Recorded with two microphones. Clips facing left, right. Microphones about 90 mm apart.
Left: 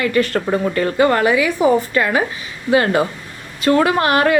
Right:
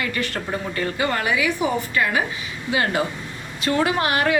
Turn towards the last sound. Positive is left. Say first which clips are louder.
# left 6 dB
turn(degrees=55)  # may be behind; listen again after turning